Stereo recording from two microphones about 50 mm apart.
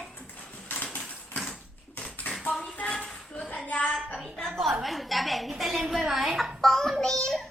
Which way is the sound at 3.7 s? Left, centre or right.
Left.